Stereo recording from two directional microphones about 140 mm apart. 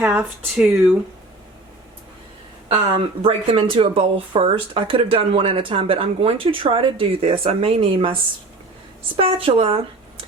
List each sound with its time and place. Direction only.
0.0 s speech: 10° right (ahead or behind)
2.6 s speech: 40° right (ahead or behind)